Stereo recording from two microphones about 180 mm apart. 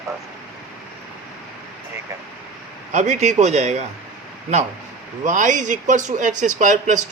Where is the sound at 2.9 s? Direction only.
40° right (ahead or behind).